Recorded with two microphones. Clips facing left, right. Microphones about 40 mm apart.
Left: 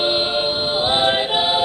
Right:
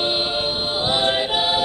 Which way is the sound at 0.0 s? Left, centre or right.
Centre.